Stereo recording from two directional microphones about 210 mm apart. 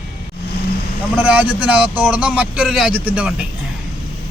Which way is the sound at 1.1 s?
5° right (ahead or behind).